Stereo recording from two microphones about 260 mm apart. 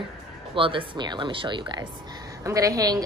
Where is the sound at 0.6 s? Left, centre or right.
Centre.